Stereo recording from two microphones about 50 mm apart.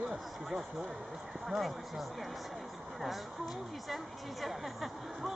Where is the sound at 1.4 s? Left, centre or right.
Centre.